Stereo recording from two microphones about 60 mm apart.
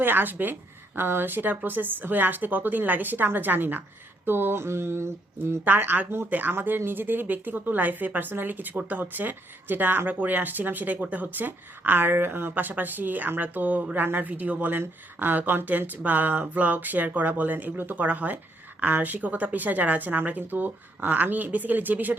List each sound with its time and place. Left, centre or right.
0.0 s speech: right
4.3 s a sound: right
5.6 s speech: right